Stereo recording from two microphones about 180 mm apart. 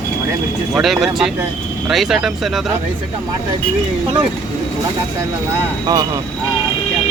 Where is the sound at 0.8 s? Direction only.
Centre (ahead or behind).